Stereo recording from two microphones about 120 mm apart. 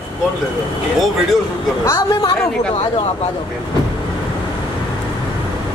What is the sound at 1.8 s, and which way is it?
Speech, 25° left (ahead or behind).